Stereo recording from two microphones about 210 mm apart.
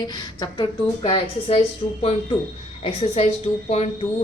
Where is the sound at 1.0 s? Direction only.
30° left (ahead or behind).